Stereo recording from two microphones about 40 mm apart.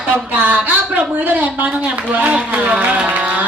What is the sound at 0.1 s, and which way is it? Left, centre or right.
Speech, right.